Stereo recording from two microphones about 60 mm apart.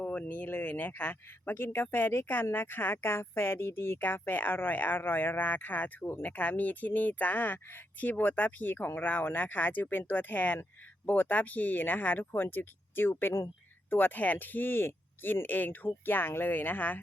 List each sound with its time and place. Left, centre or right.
0.0 s speech: left